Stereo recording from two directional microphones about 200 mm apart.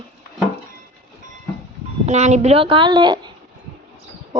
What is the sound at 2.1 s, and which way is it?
Speech, 35° right (ahead or behind).